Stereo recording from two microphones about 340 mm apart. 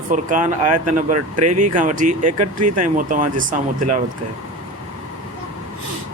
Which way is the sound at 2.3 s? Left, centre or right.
Right.